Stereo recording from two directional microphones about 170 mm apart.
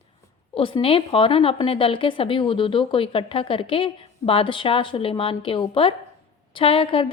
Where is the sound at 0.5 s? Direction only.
30° left (ahead or behind).